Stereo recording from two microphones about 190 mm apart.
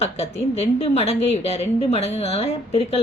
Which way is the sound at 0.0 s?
30° left (ahead or behind).